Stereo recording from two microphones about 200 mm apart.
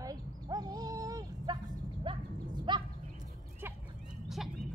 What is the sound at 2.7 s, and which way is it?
Bird, 25° right (ahead or behind).